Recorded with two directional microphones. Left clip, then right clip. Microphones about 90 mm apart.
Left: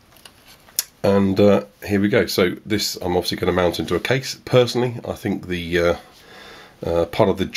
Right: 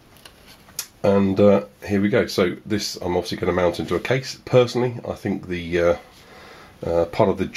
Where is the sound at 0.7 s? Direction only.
35° left (ahead or behind).